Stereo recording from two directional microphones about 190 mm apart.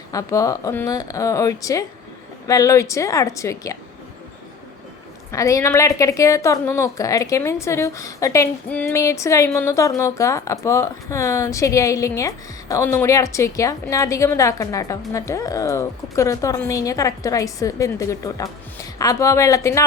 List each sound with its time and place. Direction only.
0.1 s a woman's voice: 15° left (ahead or behind)
5.3 s a woman's voice: 15° left (ahead or behind)